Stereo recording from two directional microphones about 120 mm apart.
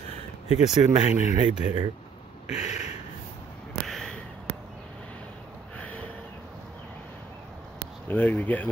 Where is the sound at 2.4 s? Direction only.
65° left (ahead or behind).